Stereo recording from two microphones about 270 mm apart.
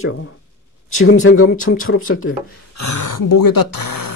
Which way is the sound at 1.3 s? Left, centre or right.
Left.